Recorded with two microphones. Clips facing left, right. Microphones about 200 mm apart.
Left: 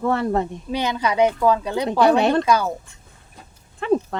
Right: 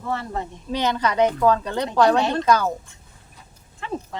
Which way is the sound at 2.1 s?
60° left (ahead or behind).